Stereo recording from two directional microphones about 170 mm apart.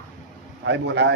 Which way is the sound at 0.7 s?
90° right.